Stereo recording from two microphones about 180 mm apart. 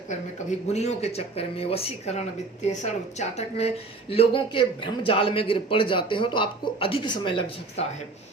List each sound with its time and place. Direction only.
0.7 s a man's voice: 35° left (ahead or behind)